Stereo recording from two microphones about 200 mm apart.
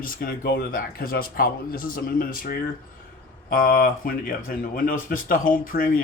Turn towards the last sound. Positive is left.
turn(degrees=45)  # may be behind; listen again after turning